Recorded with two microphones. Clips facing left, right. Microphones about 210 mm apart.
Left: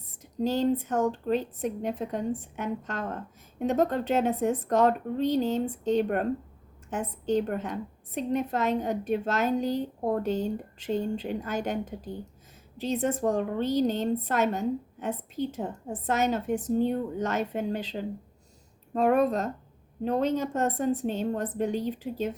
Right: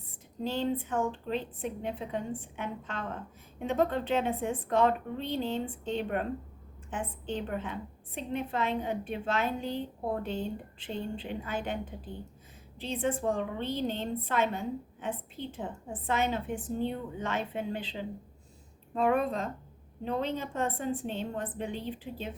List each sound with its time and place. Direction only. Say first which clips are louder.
0.4 s a woman's voice: left 6 dB; 40° left (ahead or behind)